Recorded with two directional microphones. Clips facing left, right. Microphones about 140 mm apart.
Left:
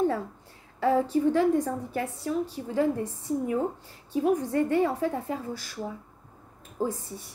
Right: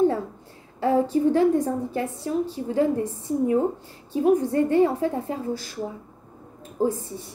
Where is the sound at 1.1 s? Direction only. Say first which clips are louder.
Right 3 dB; 25° right (ahead or behind).